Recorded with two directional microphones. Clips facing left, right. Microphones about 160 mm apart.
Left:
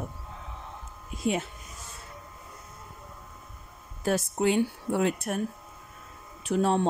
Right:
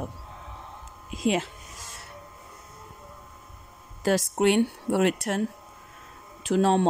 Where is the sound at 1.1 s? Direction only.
90° right.